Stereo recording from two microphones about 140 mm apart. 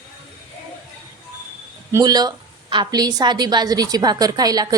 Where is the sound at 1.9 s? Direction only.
25° right (ahead or behind).